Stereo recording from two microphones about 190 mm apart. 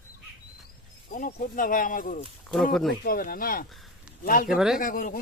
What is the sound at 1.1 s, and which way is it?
A man's voice, 45° left (ahead or behind).